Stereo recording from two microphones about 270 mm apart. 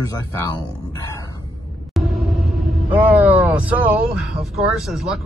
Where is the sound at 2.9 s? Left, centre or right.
Centre.